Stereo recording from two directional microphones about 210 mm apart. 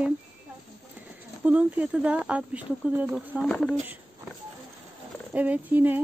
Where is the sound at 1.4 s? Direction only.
5° right (ahead or behind).